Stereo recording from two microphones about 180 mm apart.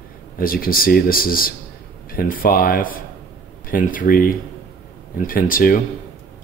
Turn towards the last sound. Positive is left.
turn(degrees=50)  # may be behind; listen again after turning